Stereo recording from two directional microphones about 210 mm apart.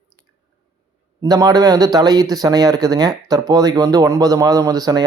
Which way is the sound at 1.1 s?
20° right (ahead or behind).